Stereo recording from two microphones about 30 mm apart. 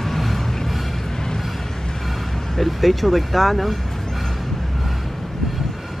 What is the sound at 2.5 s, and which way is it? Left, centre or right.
Speech, centre.